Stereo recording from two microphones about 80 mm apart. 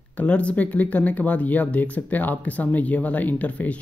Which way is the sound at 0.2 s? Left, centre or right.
Centre.